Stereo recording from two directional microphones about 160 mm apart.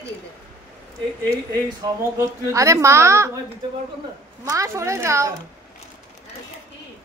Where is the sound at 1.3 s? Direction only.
20° right (ahead or behind).